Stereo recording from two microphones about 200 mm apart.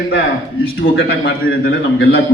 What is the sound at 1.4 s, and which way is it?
Speech, 50° left (ahead or behind).